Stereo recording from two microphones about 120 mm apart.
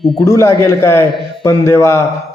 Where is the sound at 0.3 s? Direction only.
25° left (ahead or behind).